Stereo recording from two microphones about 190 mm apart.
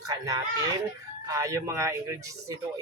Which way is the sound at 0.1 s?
15° right (ahead or behind).